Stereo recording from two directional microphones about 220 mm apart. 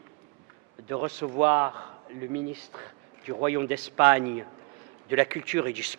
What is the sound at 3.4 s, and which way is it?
Speech, 10° right (ahead or behind).